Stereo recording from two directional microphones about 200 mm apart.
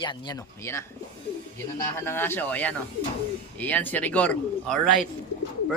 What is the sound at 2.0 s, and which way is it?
A man's voice, 10° left (ahead or behind).